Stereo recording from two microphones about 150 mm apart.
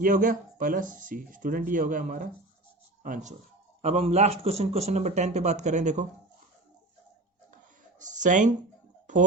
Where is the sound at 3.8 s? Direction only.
45° right (ahead or behind).